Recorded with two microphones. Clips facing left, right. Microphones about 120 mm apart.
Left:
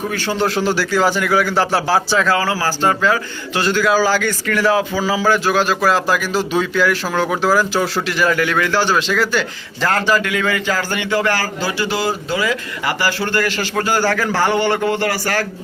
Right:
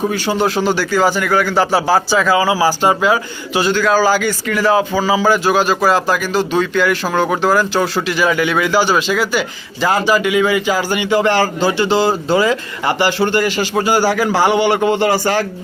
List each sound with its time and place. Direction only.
0.1 s a man's voice: 10° right (ahead or behind)
0.4 s speech: centre (ahead or behind)
3.8 s a man's voice: 5° left (ahead or behind); by 15.4 s 20° right (ahead or behind)